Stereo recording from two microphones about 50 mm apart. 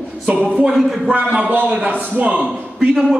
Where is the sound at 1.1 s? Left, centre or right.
Right.